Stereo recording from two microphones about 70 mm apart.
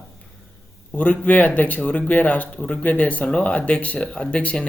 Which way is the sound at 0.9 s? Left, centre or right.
Left.